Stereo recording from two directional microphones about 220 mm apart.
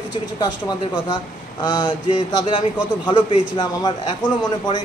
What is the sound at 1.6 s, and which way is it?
A man's voice, 20° left (ahead or behind).